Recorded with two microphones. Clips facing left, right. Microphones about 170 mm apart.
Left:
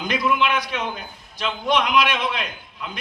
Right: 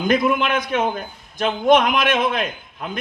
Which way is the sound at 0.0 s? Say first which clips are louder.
Right 4 dB; 50° right (ahead or behind).